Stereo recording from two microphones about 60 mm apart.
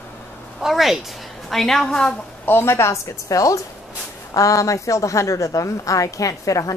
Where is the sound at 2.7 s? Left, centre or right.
Left.